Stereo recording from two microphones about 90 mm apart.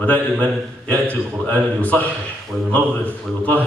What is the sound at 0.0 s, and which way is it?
A man's voice, 15° left (ahead or behind).